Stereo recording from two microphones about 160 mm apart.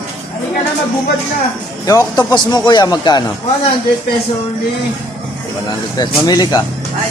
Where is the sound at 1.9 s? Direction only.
25° left (ahead or behind).